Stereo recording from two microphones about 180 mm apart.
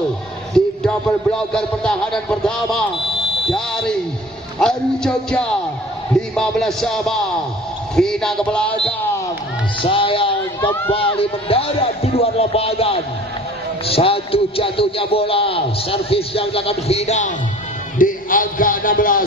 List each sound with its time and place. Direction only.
0.6 s a man's voice: 5° left (ahead or behind)
4.6 s speech: 5° left (ahead or behind)
9.8 s a man's voice: 30° left (ahead or behind)
17.9 s a man's voice: 50° left (ahead or behind)